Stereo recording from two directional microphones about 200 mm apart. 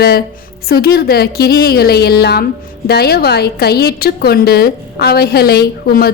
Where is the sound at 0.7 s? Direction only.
50° left (ahead or behind).